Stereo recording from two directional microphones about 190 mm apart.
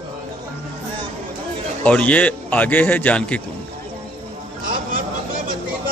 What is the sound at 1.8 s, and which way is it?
A man's voice, 5° left (ahead or behind).